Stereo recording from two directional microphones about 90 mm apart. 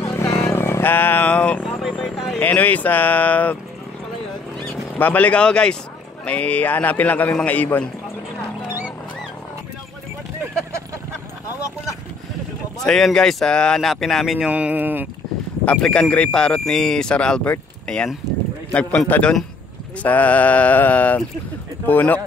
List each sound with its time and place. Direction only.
0.0 s vehicle: 35° left (ahead or behind); by 1.6 s 15° left (ahead or behind)
1.6 s vehicle: 10° right (ahead or behind)
2.0 s a sound: 5° left (ahead or behind)
2.4 s speech: 20° left (ahead or behind)
4.9 s speech: 20° left (ahead or behind)
12.8 s speech: 5° left (ahead or behind)
14.5 s speech: 15° right (ahead or behind)
15.6 s speech: 10° left (ahead or behind)